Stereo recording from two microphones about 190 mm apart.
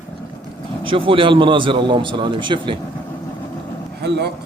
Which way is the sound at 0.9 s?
30° right (ahead or behind).